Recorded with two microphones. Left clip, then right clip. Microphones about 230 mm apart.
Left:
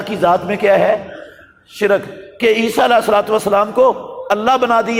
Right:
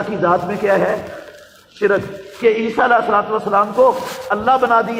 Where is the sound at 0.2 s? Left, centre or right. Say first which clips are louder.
Left 3 dB; left.